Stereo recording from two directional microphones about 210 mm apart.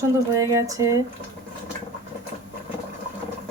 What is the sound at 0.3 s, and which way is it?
Speech, 15° right (ahead or behind).